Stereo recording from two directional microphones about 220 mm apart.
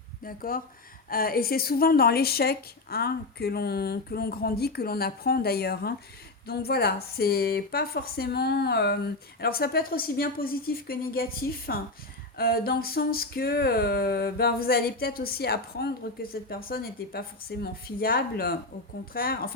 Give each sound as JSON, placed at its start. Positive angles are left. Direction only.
{"t": 0.2, "sound": "a woman's voice", "side_deg": 40}